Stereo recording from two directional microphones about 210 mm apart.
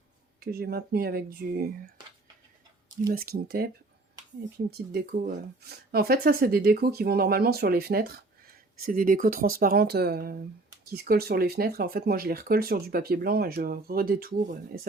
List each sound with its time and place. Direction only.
0.3 s speech: 45° right (ahead or behind)
3.1 s speech: 45° right (ahead or behind)
4.9 s speech: 45° right (ahead or behind)